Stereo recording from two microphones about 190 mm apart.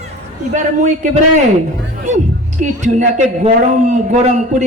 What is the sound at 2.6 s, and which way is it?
A man's voice, 40° right (ahead or behind).